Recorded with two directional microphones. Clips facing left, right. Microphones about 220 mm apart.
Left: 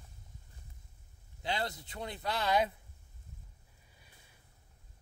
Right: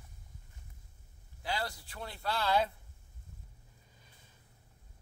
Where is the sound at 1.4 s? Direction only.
20° left (ahead or behind).